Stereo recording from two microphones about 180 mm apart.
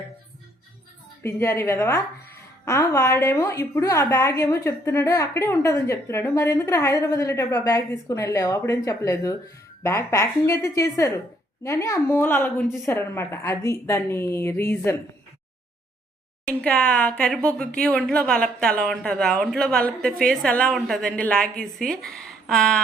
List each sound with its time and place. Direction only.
1.2 s a woman's voice: 15° left (ahead or behind)
16.5 s speech: 5° left (ahead or behind)